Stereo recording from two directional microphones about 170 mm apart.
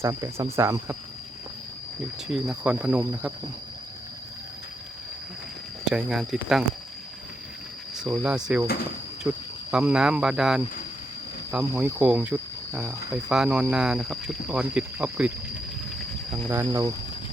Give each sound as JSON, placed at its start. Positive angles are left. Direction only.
{"t": 0.0, "sound": "speech", "side_deg": -20}
{"t": 2.3, "sound": "speech", "side_deg": -5}
{"t": 5.8, "sound": "speech", "side_deg": -5}
{"t": 7.9, "sound": "speech", "side_deg": -5}
{"t": 9.7, "sound": "speech", "side_deg": -5}
{"t": 13.3, "sound": "speech", "side_deg": -5}
{"t": 16.5, "sound": "speech", "side_deg": -15}